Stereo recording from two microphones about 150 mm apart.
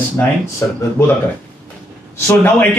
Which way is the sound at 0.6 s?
15° left (ahead or behind).